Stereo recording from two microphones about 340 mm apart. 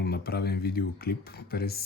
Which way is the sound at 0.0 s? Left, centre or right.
Left.